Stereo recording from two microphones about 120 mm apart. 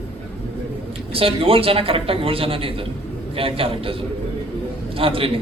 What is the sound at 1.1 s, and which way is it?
A man's voice, 50° right (ahead or behind).